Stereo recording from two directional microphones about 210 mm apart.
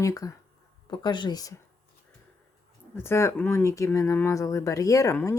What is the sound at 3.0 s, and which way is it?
Speech, 15° left (ahead or behind).